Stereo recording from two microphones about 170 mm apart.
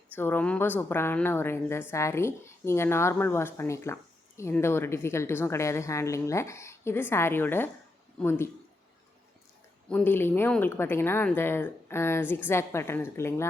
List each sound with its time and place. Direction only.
0.2 s speech: 10° left (ahead or behind)
9.9 s speech: 10° left (ahead or behind)